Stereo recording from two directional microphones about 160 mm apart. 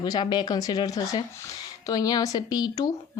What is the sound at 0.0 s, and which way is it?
Speech, 25° left (ahead or behind).